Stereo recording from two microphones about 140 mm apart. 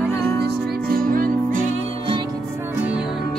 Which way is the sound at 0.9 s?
90° right.